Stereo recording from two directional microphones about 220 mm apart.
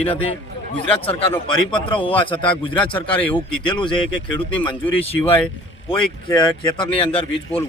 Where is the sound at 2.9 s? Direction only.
5° left (ahead or behind).